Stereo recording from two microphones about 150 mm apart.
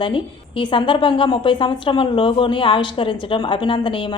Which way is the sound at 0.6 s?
35° left (ahead or behind).